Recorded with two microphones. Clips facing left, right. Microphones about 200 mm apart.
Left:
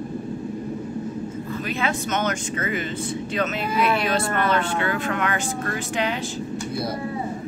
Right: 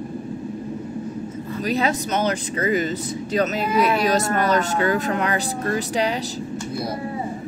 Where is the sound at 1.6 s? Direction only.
40° right (ahead or behind).